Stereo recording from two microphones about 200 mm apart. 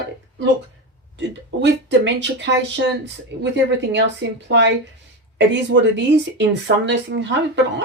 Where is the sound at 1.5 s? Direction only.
65° right (ahead or behind).